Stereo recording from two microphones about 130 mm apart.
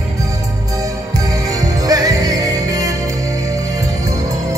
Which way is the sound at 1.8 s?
30° right (ahead or behind).